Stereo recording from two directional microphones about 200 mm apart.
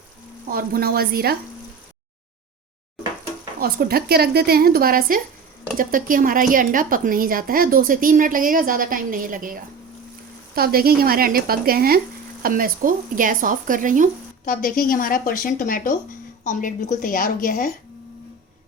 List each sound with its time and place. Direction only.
0.5 s a woman's voice: 50° right (ahead or behind)
3.6 s a woman's voice: 50° right (ahead or behind)
14.4 s a woman's voice: 45° left (ahead or behind)